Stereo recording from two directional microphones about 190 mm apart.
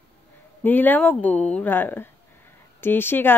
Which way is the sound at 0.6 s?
10° left (ahead or behind).